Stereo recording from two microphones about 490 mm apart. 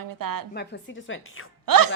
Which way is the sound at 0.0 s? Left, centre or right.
Right.